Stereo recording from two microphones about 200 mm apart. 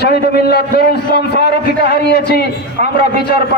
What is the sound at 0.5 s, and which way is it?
A man's voice, 50° left (ahead or behind).